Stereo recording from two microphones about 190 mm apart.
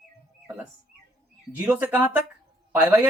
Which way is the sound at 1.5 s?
10° right (ahead or behind).